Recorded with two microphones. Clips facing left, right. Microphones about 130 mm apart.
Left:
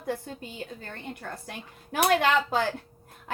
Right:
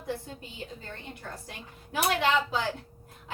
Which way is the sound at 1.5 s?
55° left (ahead or behind).